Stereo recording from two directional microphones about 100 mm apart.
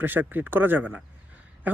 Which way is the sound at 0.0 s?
20° right (ahead or behind).